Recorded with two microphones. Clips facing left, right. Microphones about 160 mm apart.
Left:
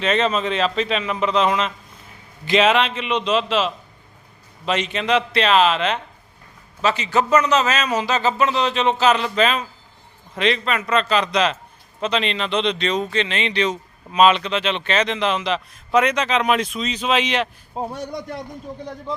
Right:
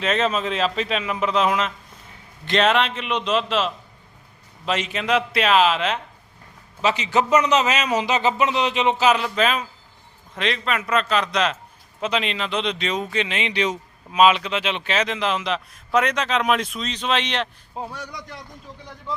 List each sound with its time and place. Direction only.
0.0 s speech: centre (ahead or behind)
6.8 s a man's voice: 15° right (ahead or behind); by 17.5 s 5° left (ahead or behind)
17.7 s a man's voice: 25° left (ahead or behind)
18.0 s speech: 55° left (ahead or behind)